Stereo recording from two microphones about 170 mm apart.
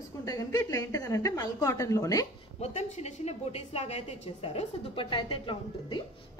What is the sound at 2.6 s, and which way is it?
A woman's voice, 40° left (ahead or behind).